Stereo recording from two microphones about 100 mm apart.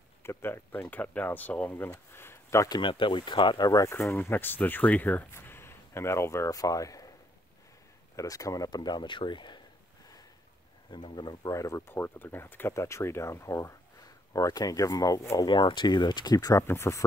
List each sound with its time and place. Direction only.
0.2 s speech: 25° left (ahead or behind)
2.7 s speech: 55° left (ahead or behind); by 3.9 s 35° left (ahead or behind)
3.9 s speech: 25° left (ahead or behind)
8.2 s speech: 35° left (ahead or behind); by 9.6 s 50° left (ahead or behind)
10.9 s speech: 50° left (ahead or behind)
11.5 s speech: 35° left (ahead or behind)
11.9 s speech: 20° left (ahead or behind)
15.5 s speech: 50° left (ahead or behind)
16.6 s speech: 25° left (ahead or behind)